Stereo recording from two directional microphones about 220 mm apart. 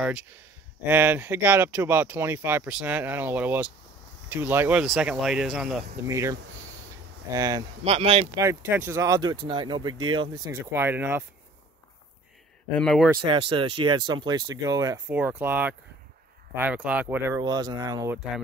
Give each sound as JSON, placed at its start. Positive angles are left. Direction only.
{"t": 0.8, "sound": "speech", "side_deg": -10}
{"t": 8.4, "sound": "speech", "side_deg": -10}
{"t": 12.7, "sound": "speech", "side_deg": 0}
{"t": 13.2, "sound": "speech", "side_deg": -20}